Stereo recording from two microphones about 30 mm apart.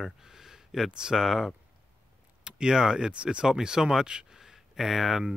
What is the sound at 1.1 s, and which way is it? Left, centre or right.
Speech, centre.